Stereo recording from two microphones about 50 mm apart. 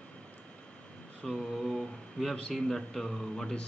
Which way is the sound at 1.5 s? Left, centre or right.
Centre.